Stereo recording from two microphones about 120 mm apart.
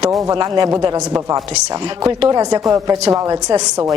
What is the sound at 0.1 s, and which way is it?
Speech, 30° right (ahead or behind).